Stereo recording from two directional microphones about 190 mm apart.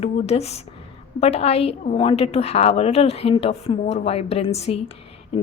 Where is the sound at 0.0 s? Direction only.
35° left (ahead or behind).